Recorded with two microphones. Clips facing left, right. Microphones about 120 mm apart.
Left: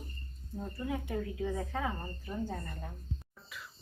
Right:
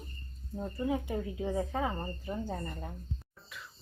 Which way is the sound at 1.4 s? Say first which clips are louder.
Right 6 dB; 25° right (ahead or behind).